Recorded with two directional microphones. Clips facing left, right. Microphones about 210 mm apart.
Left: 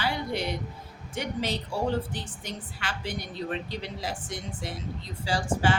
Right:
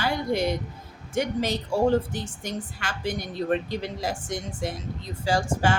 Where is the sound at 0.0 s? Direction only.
45° right (ahead or behind).